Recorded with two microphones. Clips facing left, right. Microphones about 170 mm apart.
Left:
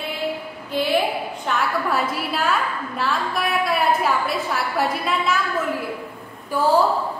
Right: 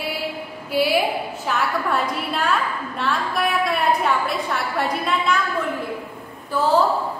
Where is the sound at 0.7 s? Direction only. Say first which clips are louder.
Right 3 dB; 10° right (ahead or behind).